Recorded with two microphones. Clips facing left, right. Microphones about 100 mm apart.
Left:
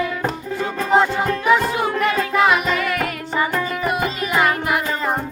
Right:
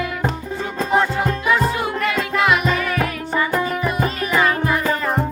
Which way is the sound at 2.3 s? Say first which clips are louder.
Left 1 dB; 25° left (ahead or behind).